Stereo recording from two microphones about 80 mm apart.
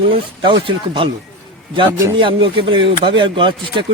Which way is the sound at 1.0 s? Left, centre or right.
Right.